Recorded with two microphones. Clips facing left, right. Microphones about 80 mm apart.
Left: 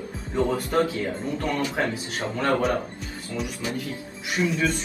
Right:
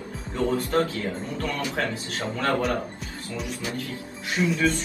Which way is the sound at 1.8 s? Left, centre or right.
Left.